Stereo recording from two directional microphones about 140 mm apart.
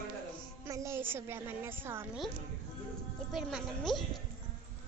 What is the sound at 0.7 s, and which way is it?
A woman's voice, 20° right (ahead or behind).